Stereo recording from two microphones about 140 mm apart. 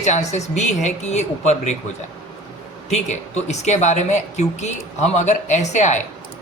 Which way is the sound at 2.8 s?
55° left (ahead or behind).